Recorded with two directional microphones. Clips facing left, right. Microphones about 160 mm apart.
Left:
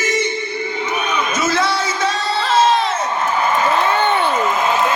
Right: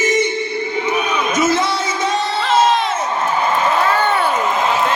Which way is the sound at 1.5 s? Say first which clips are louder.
Right 1 dB; 20° right (ahead or behind).